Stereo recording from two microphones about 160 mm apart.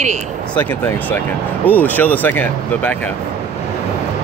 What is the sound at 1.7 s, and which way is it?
Speech, 10° left (ahead or behind).